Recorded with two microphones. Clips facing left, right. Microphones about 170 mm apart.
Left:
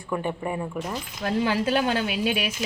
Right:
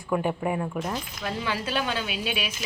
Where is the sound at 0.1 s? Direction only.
5° right (ahead or behind).